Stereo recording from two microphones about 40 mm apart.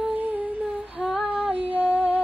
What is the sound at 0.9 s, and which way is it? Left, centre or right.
Female singing, centre.